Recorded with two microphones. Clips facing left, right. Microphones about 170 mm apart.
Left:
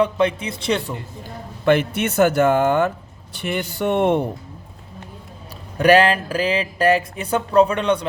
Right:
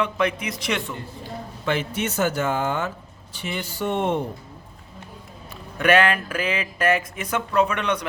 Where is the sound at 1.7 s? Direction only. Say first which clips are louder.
Left 8 dB; 60° left (ahead or behind).